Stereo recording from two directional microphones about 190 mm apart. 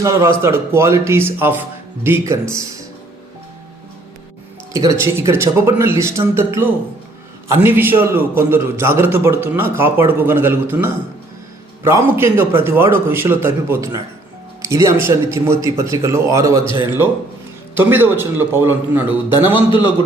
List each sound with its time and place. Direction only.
0.0 s a man's voice: 15° right (ahead or behind)
4.7 s a man's voice: 20° right (ahead or behind)
17.7 s a man's voice: 10° right (ahead or behind)